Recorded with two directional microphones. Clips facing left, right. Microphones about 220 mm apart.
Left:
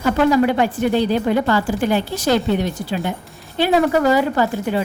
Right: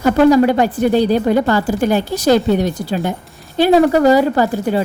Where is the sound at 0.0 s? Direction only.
40° right (ahead or behind).